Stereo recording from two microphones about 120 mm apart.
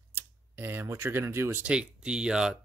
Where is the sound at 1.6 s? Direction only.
10° right (ahead or behind).